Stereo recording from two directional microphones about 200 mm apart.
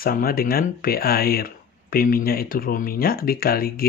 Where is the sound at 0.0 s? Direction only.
45° left (ahead or behind).